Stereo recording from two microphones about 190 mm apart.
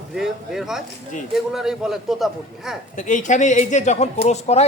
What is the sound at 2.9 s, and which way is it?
Speech, 40° left (ahead or behind).